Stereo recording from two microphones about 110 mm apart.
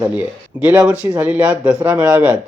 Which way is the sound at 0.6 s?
15° right (ahead or behind).